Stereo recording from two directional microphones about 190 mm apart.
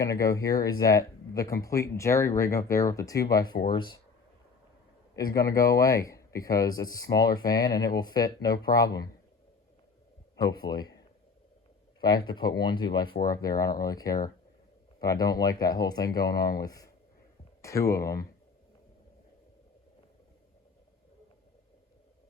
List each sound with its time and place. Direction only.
0.0 s speech: 15° left (ahead or behind)
5.1 s speech: 20° left (ahead or behind)
10.3 s speech: 20° left (ahead or behind)
11.9 s speech: 20° left (ahead or behind)